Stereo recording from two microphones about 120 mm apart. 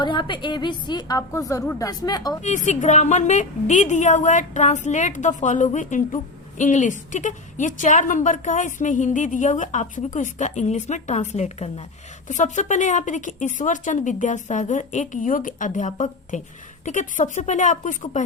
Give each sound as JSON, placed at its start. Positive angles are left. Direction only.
{"t": 0.0, "sound": "a woman's voice", "side_deg": 40}
{"t": 2.4, "sound": "a woman's voice", "side_deg": 90}
{"t": 12.3, "sound": "a woman's voice", "side_deg": 90}